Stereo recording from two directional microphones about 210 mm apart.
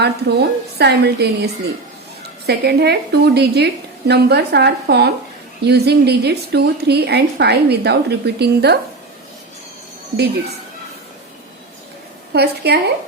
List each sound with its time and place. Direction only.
0.0 s a woman's voice: 50° right (ahead or behind)
2.5 s a woman's voice: 50° right (ahead or behind)
12.3 s a woman's voice: 50° right (ahead or behind)